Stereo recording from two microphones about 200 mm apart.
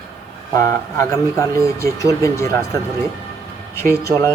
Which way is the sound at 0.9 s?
15° left (ahead or behind).